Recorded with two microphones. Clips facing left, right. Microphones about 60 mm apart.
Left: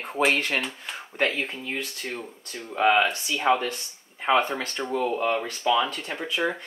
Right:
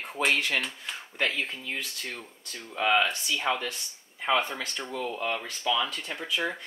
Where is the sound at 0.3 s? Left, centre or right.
Left.